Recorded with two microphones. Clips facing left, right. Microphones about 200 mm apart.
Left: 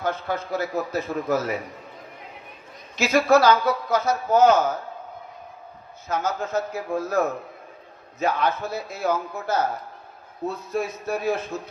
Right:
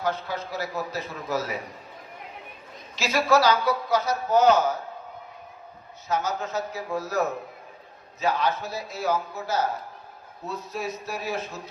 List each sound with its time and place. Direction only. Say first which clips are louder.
0.0 s a man's voice: left 2 dB; 50° left (ahead or behind)
2.9 s a man's voice: left 4 dB; 50° left (ahead or behind)
6.1 s a man's voice: left 2 dB; 55° left (ahead or behind)